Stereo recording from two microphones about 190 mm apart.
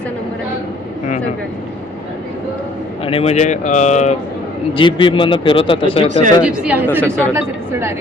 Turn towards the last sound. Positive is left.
turn(degrees=5)  # may be behind; listen again after turning